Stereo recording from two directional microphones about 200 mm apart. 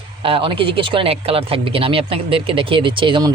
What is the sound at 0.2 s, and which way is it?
Speech, 25° right (ahead or behind).